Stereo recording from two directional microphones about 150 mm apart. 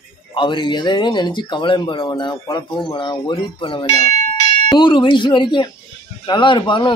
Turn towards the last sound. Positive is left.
turn(degrees=30)  # may be behind; listen again after turning